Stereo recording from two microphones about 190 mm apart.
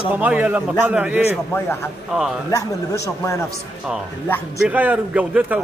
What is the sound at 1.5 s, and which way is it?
A man's voice, 10° left (ahead or behind).